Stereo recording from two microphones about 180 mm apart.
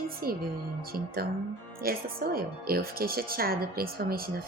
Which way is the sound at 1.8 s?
55° right (ahead or behind).